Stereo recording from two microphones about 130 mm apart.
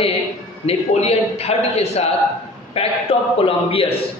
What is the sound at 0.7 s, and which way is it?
A man's voice, 50° left (ahead or behind).